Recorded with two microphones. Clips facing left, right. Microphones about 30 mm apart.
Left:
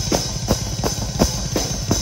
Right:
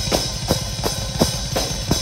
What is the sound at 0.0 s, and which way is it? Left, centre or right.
Drum kit, right.